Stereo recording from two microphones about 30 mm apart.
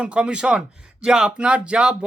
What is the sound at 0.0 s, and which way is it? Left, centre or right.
Speech, right.